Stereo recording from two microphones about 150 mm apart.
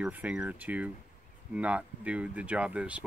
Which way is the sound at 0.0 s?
5° right (ahead or behind).